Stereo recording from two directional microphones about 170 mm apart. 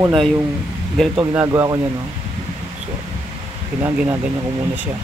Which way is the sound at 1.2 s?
10° right (ahead or behind).